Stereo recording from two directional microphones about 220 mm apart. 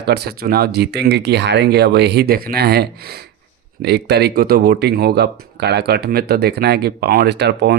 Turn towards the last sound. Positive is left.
turn(degrees=-50)  # may be behind; listen again after turning